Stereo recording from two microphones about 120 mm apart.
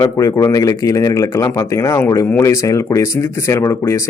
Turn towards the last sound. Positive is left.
turn(degrees=25)  # may be behind; listen again after turning